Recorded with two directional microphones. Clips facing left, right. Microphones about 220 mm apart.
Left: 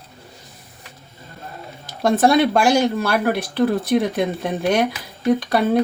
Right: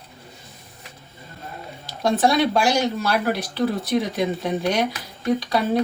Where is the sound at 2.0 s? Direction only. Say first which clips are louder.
Left 4 dB; 50° left (ahead or behind).